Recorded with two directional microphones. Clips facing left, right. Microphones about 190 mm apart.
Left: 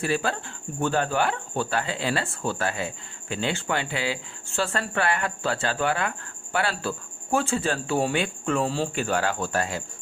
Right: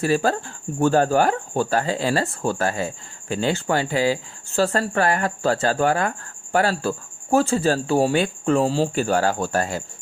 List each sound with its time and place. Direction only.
0.0 s speech: 40° right (ahead or behind)